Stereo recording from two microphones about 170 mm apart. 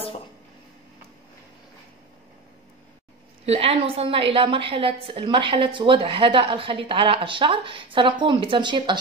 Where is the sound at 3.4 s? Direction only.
35° right (ahead or behind).